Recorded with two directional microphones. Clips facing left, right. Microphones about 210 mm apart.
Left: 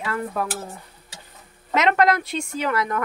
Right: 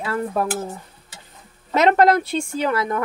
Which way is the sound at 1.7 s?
35° right (ahead or behind).